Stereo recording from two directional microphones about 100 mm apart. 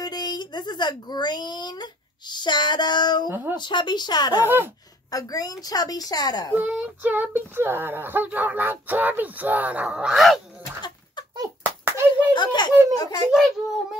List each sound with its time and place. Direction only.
0.0 s a woman's voice: 45° left (ahead or behind)
3.3 s speech: 20° right (ahead or behind)
3.5 s a woman's voice: 50° left (ahead or behind)
6.5 s speech: 15° right (ahead or behind)
11.8 s hands: 20° right (ahead or behind)
12.4 s a woman's voice: 50° left (ahead or behind)